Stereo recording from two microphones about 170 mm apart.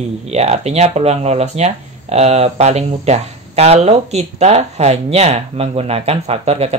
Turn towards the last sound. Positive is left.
turn(degrees=-35)  # may be behind; listen again after turning